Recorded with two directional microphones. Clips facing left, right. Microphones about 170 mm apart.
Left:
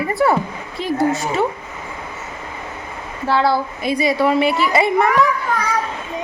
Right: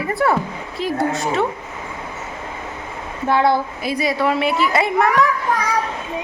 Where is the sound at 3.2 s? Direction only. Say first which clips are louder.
Right 1 dB; 20° right (ahead or behind).